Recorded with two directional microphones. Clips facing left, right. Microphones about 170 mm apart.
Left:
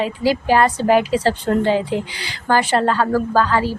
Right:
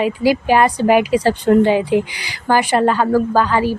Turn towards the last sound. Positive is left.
turn(degrees=-15)  # may be behind; listen again after turning